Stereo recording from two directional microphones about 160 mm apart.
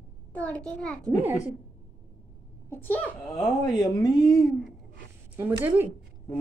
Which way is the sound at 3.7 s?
25° left (ahead or behind).